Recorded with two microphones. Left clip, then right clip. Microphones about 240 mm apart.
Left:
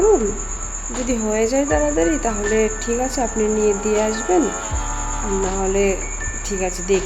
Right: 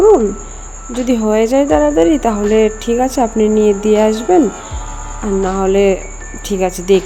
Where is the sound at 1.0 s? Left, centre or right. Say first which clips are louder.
Right 7 dB; right.